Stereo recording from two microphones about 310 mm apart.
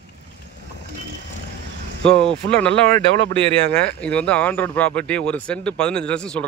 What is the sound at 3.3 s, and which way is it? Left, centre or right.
Speech, right.